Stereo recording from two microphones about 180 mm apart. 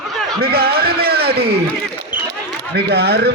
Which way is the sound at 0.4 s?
60° right (ahead or behind).